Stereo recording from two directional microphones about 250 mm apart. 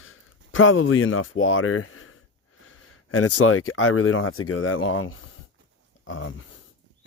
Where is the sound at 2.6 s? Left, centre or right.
Left.